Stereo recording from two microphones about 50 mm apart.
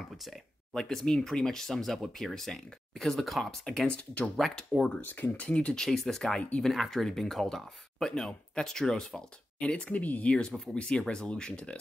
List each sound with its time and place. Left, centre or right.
0.2 s speech: centre
0.8 s speech: centre
3.8 s speech: left
5.0 s speech: left
5.5 s speech: left
5.8 s speech: centre
6.7 s speech: centre
9.6 s speech: left
10.0 s speech: left
10.7 s speech: centre